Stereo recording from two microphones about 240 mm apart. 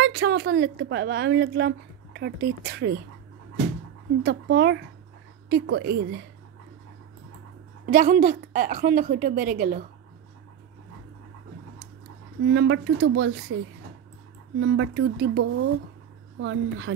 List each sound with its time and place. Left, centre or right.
0.0 s a woman's voice: right
4.2 s a woman's voice: right
7.8 s a woman's voice: right
12.4 s a woman's voice: right
14.6 s a woman's voice: right